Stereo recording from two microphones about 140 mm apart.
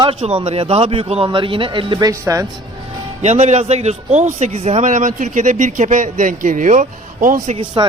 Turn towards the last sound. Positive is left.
turn(degrees=-35)  # may be behind; listen again after turning